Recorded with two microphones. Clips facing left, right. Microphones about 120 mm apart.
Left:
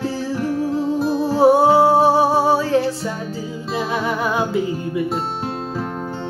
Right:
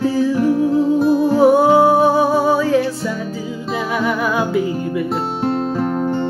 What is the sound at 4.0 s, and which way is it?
Music, 25° left (ahead or behind).